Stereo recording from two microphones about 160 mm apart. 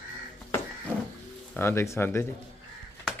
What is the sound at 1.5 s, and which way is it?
Speech, 15° left (ahead or behind).